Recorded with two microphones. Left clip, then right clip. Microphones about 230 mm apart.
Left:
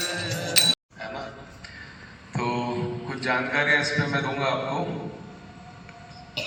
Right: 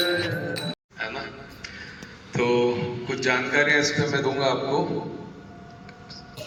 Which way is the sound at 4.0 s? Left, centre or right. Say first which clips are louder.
Right 2 dB; centre.